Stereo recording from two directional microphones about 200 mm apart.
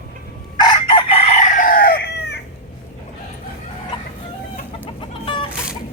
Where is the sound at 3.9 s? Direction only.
25° left (ahead or behind).